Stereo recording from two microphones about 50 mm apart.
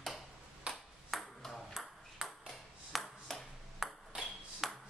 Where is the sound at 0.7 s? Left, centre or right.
Centre.